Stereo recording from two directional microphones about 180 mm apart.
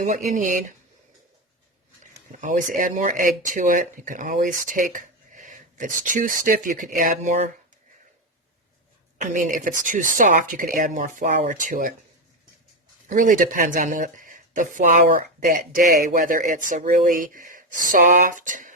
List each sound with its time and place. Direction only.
0.0 s speech: 45° right (ahead or behind)
2.4 s speech: 45° right (ahead or behind)
9.2 s speech: 45° right (ahead or behind)
13.1 s speech: 45° right (ahead or behind)